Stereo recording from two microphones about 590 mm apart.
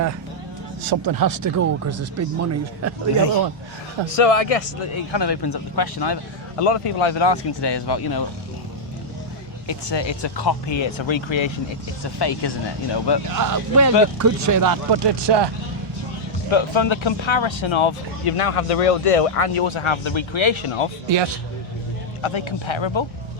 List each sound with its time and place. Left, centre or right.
0.8 s speech: right
4.2 s speech: left
4.9 s speech: left
6.6 s speech: left
9.6 s speech: left
13.3 s speech: right
16.5 s speech: left
22.2 s speech: left